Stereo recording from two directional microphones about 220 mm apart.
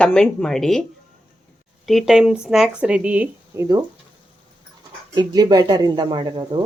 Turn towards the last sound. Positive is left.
turn(degrees=-20)  # may be behind; listen again after turning